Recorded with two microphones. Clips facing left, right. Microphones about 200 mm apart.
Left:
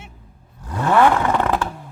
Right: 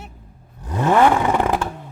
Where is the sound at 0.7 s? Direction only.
20° right (ahead or behind).